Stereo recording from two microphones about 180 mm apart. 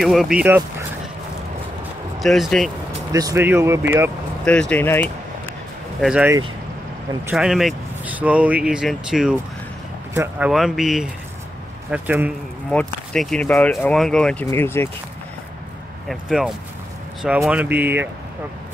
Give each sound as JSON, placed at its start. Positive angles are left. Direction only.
{"t": 0.0, "sound": "speech", "side_deg": 0}
{"t": 2.1, "sound": "speech", "side_deg": 0}
{"t": 3.1, "sound": "speech", "side_deg": -20}
{"t": 4.5, "sound": "speech", "side_deg": 5}
{"t": 5.9, "sound": "speech", "side_deg": -5}
{"t": 7.3, "sound": "speech", "side_deg": 0}
{"t": 10.5, "sound": "speech", "side_deg": 0}
{"t": 12.7, "sound": "speech", "side_deg": 5}
{"t": 16.1, "sound": "speech", "side_deg": 0}